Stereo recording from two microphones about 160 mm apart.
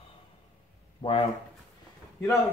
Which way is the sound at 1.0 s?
30° left (ahead or behind).